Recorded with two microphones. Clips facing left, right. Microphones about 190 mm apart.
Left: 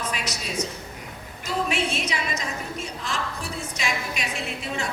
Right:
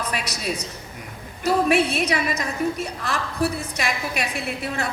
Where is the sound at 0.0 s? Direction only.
60° right (ahead or behind).